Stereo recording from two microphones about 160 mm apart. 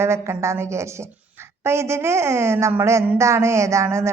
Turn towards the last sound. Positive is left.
turn(degrees=-15)  # may be behind; listen again after turning